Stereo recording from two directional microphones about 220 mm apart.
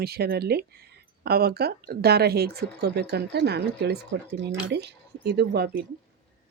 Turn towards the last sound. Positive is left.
turn(degrees=-45)  # may be behind; listen again after turning